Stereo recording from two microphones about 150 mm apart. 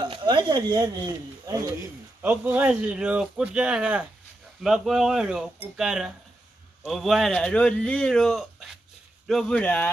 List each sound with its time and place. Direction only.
0.0 s speech: 30° right (ahead or behind)
2.2 s a man's voice: 10° right (ahead or behind); by 9.8 s 10° left (ahead or behind)